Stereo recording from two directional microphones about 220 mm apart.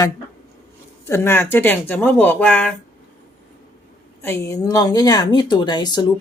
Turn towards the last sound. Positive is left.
turn(degrees=20)  # may be behind; listen again after turning